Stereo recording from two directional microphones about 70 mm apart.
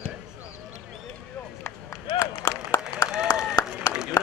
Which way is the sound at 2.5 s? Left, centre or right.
Left.